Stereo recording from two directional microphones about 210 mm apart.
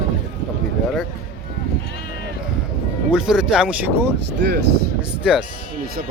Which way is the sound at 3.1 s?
5° right (ahead or behind).